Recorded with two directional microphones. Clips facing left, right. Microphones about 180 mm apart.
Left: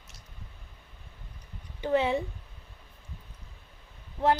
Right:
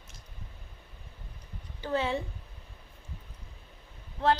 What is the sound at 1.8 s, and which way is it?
Speech, 20° left (ahead or behind).